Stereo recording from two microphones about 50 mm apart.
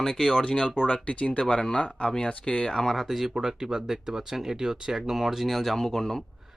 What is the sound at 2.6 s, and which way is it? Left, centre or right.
Speech, centre.